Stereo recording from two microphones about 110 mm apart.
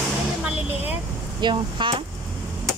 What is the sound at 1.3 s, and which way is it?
Speech, 45° right (ahead or behind).